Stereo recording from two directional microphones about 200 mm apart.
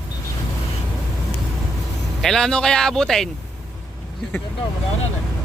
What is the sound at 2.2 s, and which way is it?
Speech, centre (ahead or behind).